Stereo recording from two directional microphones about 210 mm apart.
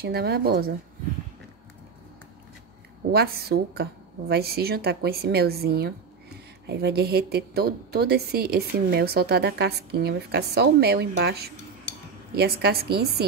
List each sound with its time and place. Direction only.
0.0 s speech: 50° right (ahead or behind)
3.1 s speech: 50° right (ahead or behind)